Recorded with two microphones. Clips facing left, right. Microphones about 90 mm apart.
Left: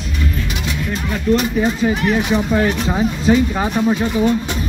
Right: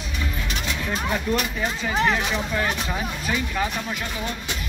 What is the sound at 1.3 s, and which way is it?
Speech, 15° right (ahead or behind).